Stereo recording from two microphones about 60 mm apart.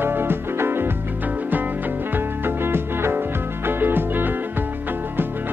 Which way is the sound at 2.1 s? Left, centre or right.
Right.